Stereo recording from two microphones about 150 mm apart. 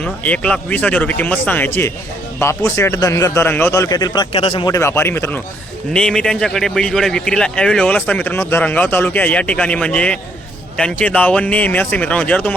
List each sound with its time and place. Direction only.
0.0 s a man's voice: 10° left (ahead or behind); by 4.3 s 25° left (ahead or behind)
4.3 s speech: 40° left (ahead or behind)
4.6 s a man's voice: 20° left (ahead or behind)